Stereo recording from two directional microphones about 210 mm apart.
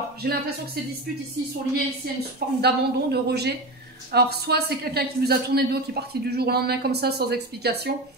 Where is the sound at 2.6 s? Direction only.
50° right (ahead or behind).